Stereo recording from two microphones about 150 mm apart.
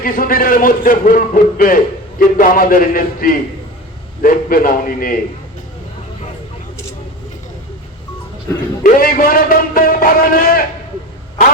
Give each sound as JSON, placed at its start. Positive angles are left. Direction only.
{"t": 0.0, "sound": "a man's voice", "side_deg": 70}
{"t": 8.8, "sound": "a man's voice", "side_deg": 70}